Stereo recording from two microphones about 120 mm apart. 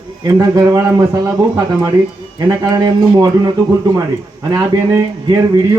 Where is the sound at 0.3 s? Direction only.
25° right (ahead or behind).